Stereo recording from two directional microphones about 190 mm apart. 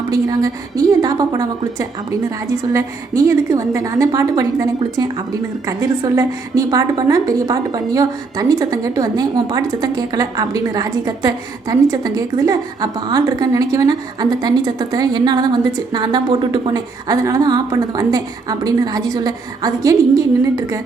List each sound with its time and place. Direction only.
0.1 s a woman's voice: 20° right (ahead or behind)